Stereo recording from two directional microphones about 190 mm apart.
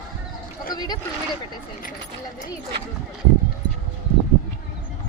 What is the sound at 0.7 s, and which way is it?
Speech, 20° left (ahead or behind).